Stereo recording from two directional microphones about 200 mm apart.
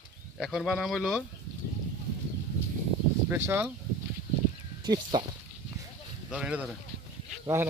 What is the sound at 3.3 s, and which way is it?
Speech, 10° right (ahead or behind).